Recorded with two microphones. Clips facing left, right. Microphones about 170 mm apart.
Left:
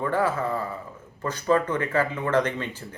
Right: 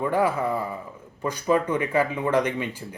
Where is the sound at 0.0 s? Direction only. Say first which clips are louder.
Right 2 dB; 15° right (ahead or behind).